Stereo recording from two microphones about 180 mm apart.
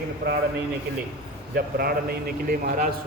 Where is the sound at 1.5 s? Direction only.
60° right (ahead or behind).